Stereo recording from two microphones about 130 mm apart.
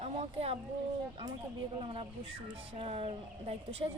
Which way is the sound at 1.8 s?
45° right (ahead or behind).